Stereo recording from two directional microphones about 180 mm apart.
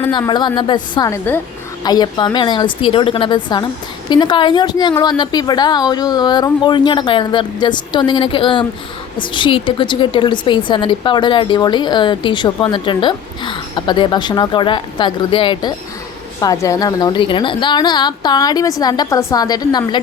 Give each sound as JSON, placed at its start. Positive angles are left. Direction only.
{"t": 0.1, "sound": "a woman's voice", "side_deg": 25}